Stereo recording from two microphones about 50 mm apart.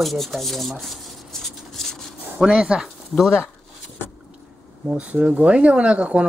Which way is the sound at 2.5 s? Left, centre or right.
Centre.